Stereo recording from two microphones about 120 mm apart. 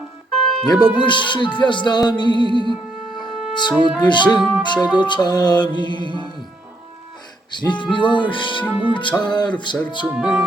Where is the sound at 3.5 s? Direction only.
40° left (ahead or behind).